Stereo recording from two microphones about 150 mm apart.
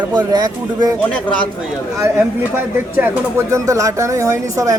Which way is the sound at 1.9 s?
15° right (ahead or behind).